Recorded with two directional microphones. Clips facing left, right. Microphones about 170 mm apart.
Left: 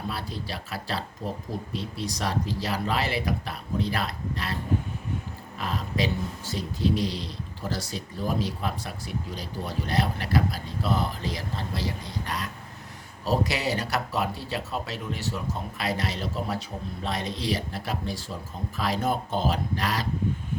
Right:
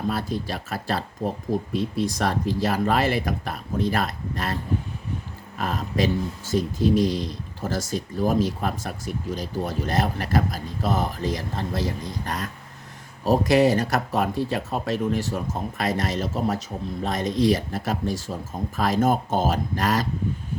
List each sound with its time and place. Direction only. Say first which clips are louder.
0.1 s speech: right 7 dB; 45° right (ahead or behind)
5.5 s speech: right 4 dB; 45° right (ahead or behind)